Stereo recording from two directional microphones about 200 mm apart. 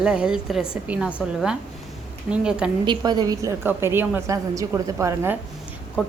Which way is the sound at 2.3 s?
5° right (ahead or behind).